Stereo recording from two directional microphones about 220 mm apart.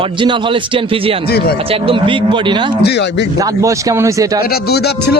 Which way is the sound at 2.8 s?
50° left (ahead or behind).